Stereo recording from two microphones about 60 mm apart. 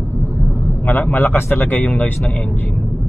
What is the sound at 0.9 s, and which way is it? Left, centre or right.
A man's voice, left.